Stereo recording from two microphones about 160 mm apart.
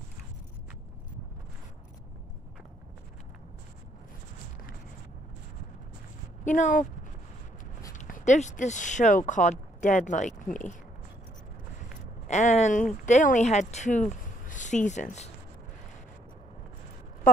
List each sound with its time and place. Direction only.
6.4 s speech: 50° left (ahead or behind)
7.9 s speech: 50° left (ahead or behind)
12.3 s speech: 45° left (ahead or behind)